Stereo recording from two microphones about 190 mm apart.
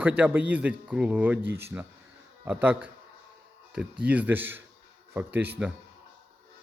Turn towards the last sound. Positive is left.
turn(degrees=-10)  # may be behind; listen again after turning